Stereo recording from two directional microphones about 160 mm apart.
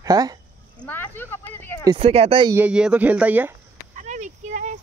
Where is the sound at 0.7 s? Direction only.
10° left (ahead or behind).